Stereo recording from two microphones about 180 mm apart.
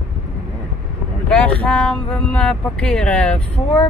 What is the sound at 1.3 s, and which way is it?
Speech, 5° left (ahead or behind).